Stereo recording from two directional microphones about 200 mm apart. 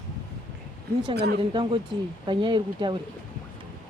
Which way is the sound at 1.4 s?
25° right (ahead or behind).